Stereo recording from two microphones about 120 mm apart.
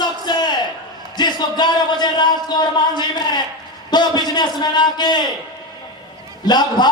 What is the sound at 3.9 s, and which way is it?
A man's voice, 35° left (ahead or behind).